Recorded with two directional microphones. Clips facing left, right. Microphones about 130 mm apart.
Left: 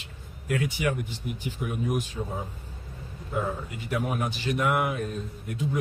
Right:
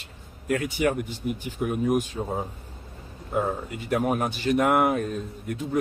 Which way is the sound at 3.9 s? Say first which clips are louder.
Right 5 dB; 45° right (ahead or behind).